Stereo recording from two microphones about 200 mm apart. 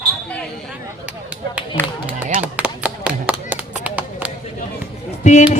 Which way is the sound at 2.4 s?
5° right (ahead or behind).